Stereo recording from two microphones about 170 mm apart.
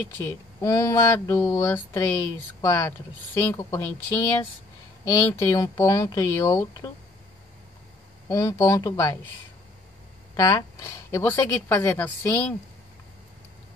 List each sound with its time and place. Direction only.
0.6 s speech: 20° left (ahead or behind)
8.3 s speech: 20° left (ahead or behind)
10.3 s speech: 20° left (ahead or behind)